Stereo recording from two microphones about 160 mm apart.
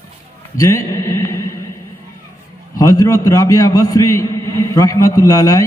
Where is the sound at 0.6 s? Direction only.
20° left (ahead or behind).